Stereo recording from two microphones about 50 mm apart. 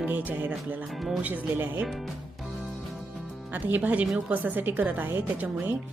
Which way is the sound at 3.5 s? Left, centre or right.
Right.